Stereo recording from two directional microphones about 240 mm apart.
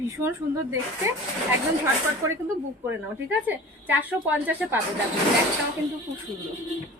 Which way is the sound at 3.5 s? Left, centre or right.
Centre.